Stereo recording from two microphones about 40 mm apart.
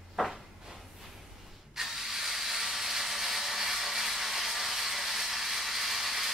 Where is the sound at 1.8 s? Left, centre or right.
Centre.